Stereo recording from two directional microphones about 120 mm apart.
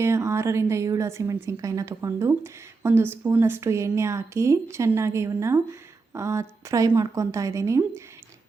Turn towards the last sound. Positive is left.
turn(degrees=-25)  # may be behind; listen again after turning